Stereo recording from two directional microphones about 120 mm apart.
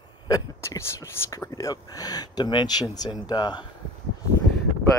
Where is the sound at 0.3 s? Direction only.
25° left (ahead or behind).